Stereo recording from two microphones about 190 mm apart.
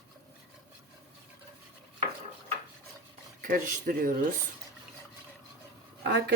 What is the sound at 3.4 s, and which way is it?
Speech, 45° right (ahead or behind).